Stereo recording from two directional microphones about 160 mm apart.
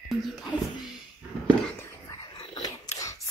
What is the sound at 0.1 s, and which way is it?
Speech, centre (ahead or behind).